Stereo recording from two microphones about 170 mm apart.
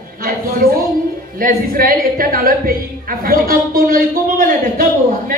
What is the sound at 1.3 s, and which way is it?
A woman's voice, 55° right (ahead or behind).